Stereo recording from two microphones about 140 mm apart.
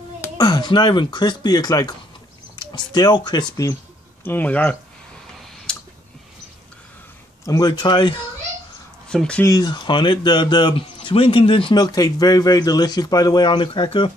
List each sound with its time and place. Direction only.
0.4 s a man's voice: 30° left (ahead or behind)
4.2 s speech: 15° left (ahead or behind)
5.7 s a sound: 5° left (ahead or behind)
7.4 s a man's voice: 25° left (ahead or behind)
9.1 s speech: 5° left (ahead or behind)
9.4 s a man's voice: 25° left (ahead or behind)